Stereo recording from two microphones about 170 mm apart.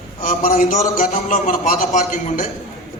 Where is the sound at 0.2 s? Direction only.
50° left (ahead or behind).